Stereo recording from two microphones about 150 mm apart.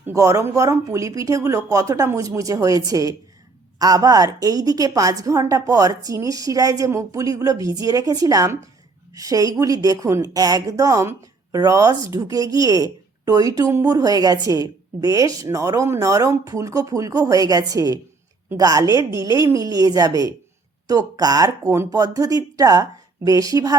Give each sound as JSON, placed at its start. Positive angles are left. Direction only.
{"t": 0.0, "sound": "a woman's voice", "side_deg": -20}